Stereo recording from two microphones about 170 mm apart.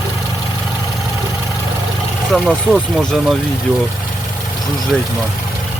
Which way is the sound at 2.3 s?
5° left (ahead or behind).